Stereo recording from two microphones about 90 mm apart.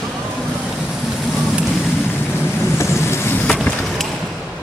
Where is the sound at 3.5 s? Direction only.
5° left (ahead or behind).